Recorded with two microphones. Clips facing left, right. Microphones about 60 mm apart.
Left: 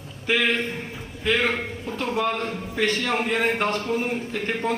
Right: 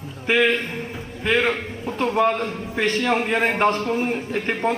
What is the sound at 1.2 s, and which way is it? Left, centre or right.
Speech, right.